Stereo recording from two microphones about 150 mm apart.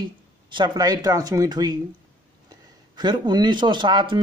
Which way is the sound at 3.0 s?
30° right (ahead or behind).